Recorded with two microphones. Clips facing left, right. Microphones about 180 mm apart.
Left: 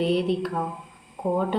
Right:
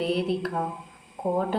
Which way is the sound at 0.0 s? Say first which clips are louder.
Left 3 dB; centre (ahead or behind).